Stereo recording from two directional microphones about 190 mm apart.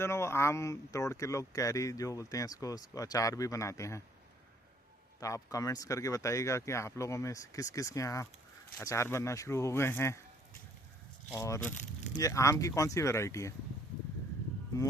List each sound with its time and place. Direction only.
0.0 s speech: 15° left (ahead or behind)
5.2 s speech: 15° left (ahead or behind)
11.3 s speech: 15° left (ahead or behind)